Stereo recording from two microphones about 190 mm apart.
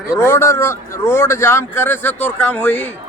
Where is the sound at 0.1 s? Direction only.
15° left (ahead or behind).